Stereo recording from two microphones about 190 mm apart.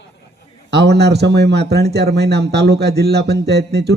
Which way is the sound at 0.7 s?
60° right (ahead or behind).